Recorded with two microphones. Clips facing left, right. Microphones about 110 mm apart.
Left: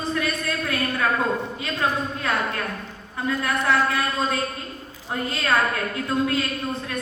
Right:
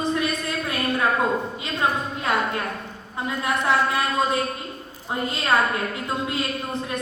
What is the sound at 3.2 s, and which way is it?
A woman's voice, 20° right (ahead or behind).